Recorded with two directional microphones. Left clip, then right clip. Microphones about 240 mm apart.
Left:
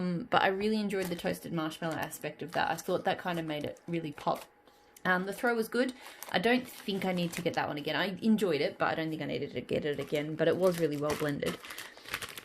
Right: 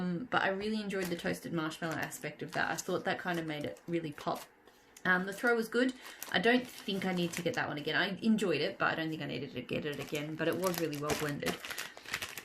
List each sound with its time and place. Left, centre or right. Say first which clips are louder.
0.0 s speech: left 4 dB; left